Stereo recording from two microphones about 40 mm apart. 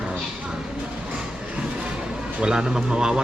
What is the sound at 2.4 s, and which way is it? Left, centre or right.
Speech, centre.